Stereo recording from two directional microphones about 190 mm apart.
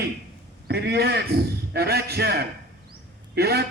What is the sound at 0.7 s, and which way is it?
A man's voice, 60° right (ahead or behind).